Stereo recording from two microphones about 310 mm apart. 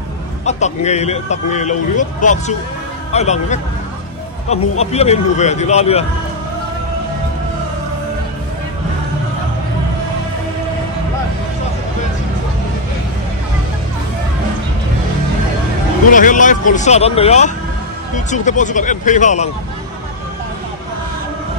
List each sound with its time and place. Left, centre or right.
0.5 s a man's voice: left
16.1 s a man's voice: left